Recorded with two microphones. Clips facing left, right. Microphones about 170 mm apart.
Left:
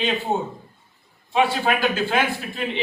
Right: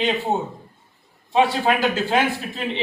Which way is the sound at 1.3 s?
30° right (ahead or behind).